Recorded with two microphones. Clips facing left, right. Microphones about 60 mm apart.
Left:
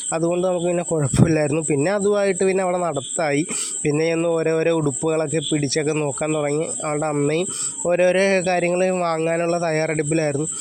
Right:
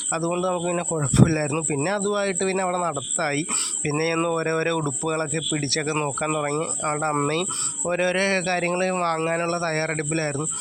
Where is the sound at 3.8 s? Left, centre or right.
Centre.